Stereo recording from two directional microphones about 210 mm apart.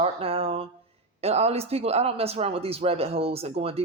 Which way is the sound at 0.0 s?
25° right (ahead or behind).